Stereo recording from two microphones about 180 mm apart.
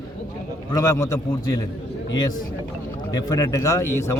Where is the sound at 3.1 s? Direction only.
20° left (ahead or behind).